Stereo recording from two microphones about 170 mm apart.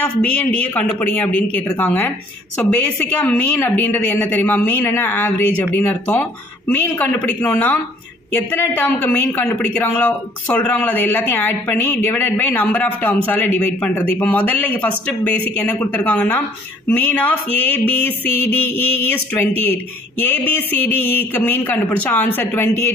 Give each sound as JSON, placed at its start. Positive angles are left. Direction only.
{"t": 0.2, "sound": "speech", "side_deg": 10}